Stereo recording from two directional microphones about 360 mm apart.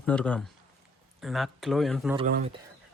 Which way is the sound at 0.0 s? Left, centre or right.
Centre.